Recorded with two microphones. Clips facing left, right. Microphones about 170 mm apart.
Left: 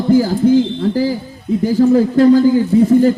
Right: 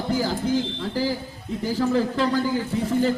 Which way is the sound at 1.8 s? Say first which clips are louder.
Left 12 dB; 45° left (ahead or behind).